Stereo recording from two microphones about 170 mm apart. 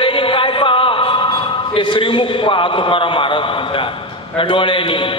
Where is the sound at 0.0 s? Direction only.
30° left (ahead or behind).